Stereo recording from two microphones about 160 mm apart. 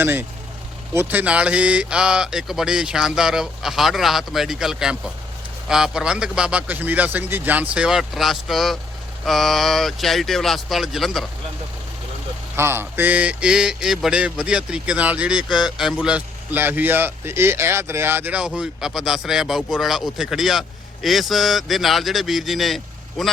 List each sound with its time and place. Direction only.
0.0 s speech: 15° right (ahead or behind)
12.5 s speech: 15° right (ahead or behind); by 23.3 s centre (ahead or behind)